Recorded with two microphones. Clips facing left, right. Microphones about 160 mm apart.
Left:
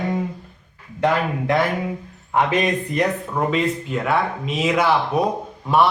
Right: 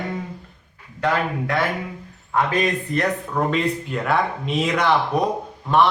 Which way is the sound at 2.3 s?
15° left (ahead or behind).